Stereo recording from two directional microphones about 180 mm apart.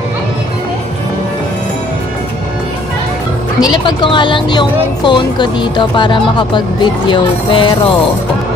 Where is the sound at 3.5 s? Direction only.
25° left (ahead or behind).